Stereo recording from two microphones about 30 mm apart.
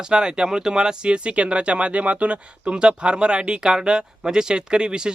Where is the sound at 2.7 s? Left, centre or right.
Right.